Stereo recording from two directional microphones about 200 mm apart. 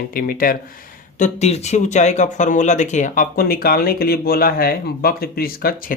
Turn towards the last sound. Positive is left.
turn(degrees=45)  # may be behind; listen again after turning